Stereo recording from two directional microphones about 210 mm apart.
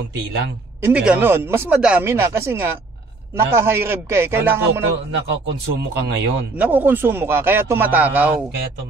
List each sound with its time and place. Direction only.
0.8 s speech: 5° right (ahead or behind)
5.1 s speech: 60° right (ahead or behind)
6.6 s speech: 10° right (ahead or behind)